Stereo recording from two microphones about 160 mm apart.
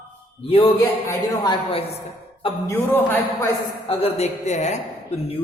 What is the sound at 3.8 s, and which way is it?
Speech, 40° left (ahead or behind).